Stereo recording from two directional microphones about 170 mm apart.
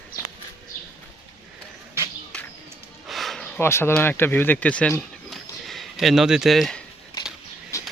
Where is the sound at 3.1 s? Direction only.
Centre (ahead or behind).